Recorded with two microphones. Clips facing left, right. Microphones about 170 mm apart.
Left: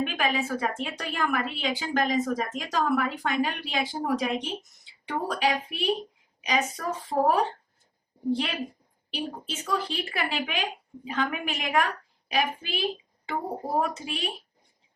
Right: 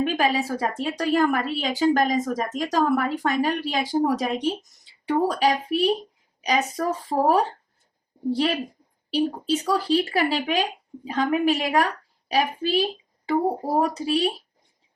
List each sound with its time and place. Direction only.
0.0 s a woman's voice: 35° right (ahead or behind)